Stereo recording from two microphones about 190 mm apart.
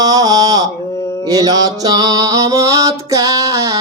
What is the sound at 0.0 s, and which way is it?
Mantra, 20° right (ahead or behind).